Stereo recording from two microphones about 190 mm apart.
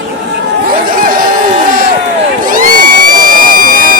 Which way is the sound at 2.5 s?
45° right (ahead or behind).